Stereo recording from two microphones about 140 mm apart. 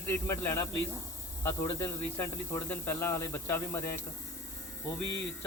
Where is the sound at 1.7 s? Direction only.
25° left (ahead or behind).